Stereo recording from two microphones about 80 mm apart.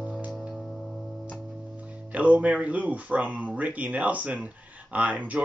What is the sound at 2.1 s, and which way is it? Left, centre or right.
Music, centre.